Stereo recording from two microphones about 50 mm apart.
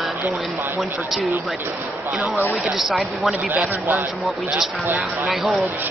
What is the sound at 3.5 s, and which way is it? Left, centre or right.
Speech, right.